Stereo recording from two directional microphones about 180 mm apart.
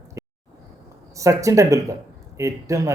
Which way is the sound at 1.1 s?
20° right (ahead or behind).